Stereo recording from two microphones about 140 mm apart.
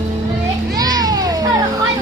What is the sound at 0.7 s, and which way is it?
Children playing, 25° right (ahead or behind).